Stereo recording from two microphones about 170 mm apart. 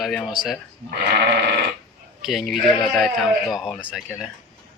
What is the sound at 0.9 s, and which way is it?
Speech, 70° right (ahead or behind).